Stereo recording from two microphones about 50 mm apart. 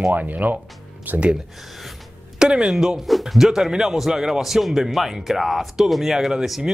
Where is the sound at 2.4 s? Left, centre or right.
Centre.